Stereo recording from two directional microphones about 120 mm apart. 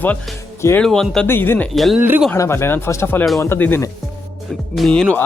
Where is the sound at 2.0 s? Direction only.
15° right (ahead or behind).